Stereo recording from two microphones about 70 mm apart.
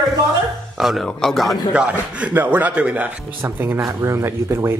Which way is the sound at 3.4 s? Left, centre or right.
Right.